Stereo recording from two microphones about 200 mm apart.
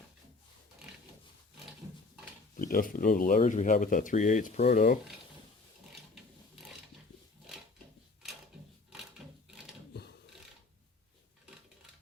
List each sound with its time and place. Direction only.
2.6 s speech: 45° left (ahead or behind)
6.6 s a sound: centre (ahead or behind)
9.9 s mechanisms: 55° left (ahead or behind)